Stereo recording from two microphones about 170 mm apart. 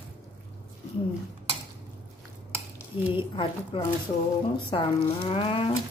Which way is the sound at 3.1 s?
30° left (ahead or behind).